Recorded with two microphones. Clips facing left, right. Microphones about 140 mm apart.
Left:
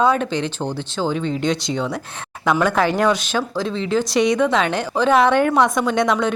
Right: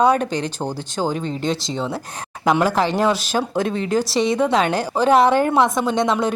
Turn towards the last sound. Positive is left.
turn(degrees=-30)  # may be behind; listen again after turning